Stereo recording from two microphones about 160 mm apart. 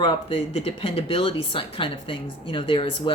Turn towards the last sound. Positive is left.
turn(degrees=35)  # may be behind; listen again after turning